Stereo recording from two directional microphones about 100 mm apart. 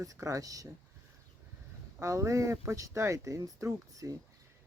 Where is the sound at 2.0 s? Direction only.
30° right (ahead or behind).